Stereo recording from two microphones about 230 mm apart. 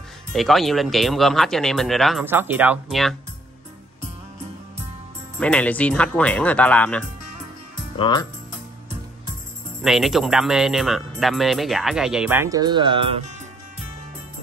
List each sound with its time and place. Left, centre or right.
0.3 s speech: centre
5.4 s speech: centre
8.0 s speech: centre
9.8 s speech: centre; by 13.2 s right